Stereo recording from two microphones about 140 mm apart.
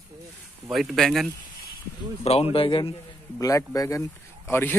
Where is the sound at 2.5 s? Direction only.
40° left (ahead or behind).